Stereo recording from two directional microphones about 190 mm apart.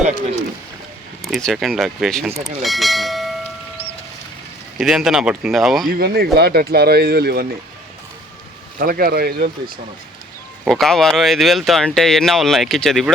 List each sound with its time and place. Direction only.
1.2 s speech: centre (ahead or behind)
4.8 s speech: 5° right (ahead or behind)
5.9 s speech: 55° right (ahead or behind)
8.8 s speech: 50° right (ahead or behind)
10.7 s speech: centre (ahead or behind)